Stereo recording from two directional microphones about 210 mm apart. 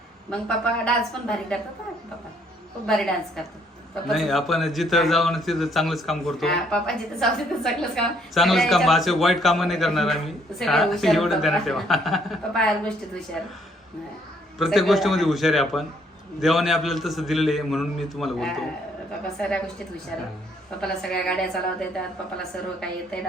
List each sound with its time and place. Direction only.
0.3 s a man's voice: 5° left (ahead or behind)
2.8 s a man's voice: centre (ahead or behind)
14.6 s a man's voice: centre (ahead or behind)